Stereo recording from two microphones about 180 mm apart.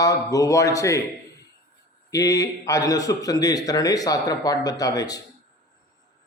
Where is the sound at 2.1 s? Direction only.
20° left (ahead or behind).